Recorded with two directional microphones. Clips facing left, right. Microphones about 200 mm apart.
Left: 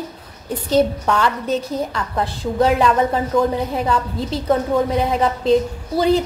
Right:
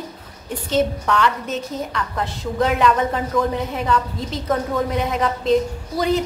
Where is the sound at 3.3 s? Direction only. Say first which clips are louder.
Left 3 dB; 25° left (ahead or behind).